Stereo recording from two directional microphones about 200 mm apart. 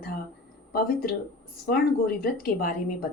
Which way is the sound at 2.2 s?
50° left (ahead or behind).